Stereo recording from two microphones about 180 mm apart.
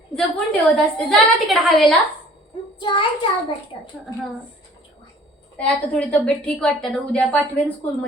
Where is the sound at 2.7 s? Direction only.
25° left (ahead or behind).